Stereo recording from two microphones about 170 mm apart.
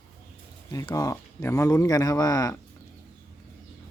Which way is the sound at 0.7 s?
20° left (ahead or behind).